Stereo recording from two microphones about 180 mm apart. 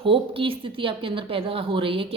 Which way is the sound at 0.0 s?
30° right (ahead or behind).